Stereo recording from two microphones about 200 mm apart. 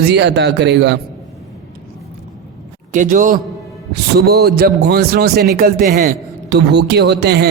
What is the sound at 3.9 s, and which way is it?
A man's voice, 55° right (ahead or behind).